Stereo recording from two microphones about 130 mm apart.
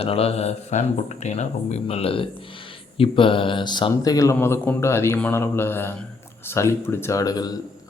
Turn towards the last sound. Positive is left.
turn(degrees=30)  # may be behind; listen again after turning